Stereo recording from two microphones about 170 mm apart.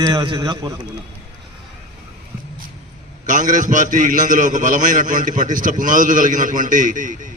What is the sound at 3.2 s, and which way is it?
A man's voice, 50° right (ahead or behind).